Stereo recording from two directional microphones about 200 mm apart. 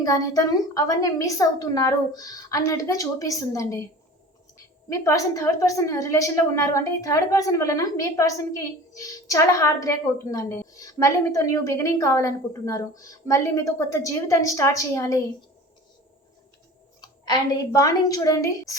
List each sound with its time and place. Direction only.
0.0 s a woman's voice: 20° left (ahead or behind)
4.9 s a woman's voice: 15° left (ahead or behind)
17.0 s a woman's voice: 20° left (ahead or behind)